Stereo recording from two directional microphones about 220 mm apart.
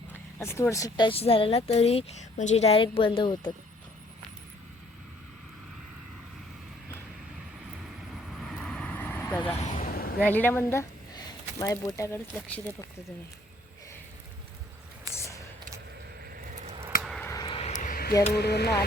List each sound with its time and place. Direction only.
0.1 s speech: 10° left (ahead or behind)
8.1 s vehicle: centre (ahead or behind)
9.6 s vehicle: 35° left (ahead or behind)
10.2 s speech: 10° left (ahead or behind)
15.1 s a sound: 15° left (ahead or behind)
16.6 s a sound: 30° right (ahead or behind)
17.0 s a sound: centre (ahead or behind)
17.2 s vehicle: 15° left (ahead or behind); by 18.1 s 40° left (ahead or behind)
18.3 s speech: 50° left (ahead or behind)